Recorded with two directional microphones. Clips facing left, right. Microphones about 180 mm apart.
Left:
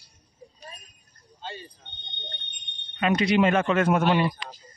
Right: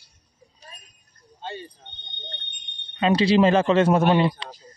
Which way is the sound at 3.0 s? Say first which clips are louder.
Right 4 dB; 30° right (ahead or behind).